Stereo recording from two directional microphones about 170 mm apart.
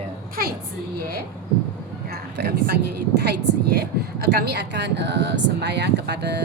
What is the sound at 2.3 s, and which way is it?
A woman's voice, 70° right (ahead or behind).